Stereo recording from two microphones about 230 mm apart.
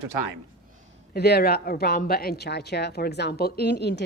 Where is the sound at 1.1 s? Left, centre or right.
Left.